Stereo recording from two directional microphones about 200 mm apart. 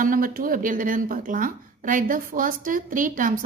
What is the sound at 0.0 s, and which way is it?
Speech, 45° right (ahead or behind).